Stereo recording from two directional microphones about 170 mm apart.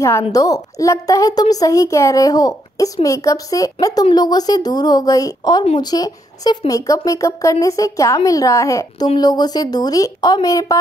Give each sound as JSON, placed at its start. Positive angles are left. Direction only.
{"t": 0.3, "sound": "a woman's voice", "side_deg": 20}